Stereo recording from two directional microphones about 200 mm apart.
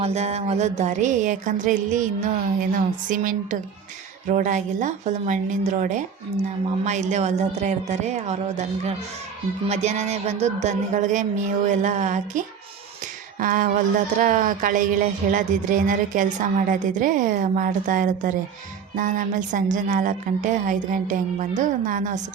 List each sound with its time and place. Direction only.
0.0 s speech: 30° right (ahead or behind)